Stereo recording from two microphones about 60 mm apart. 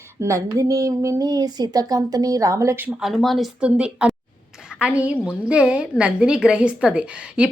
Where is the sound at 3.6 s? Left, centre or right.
Centre.